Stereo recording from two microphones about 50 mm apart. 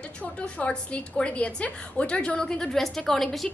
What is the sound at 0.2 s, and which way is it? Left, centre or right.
A woman's voice, left.